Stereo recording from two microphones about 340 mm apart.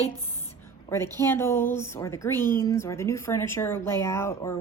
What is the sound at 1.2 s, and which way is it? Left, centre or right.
A woman's voice, centre.